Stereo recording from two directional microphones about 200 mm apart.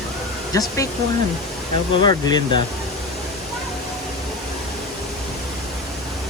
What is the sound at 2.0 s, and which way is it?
Speech, 20° left (ahead or behind).